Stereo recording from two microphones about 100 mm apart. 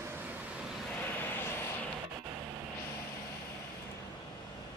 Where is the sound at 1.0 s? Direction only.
20° left (ahead or behind).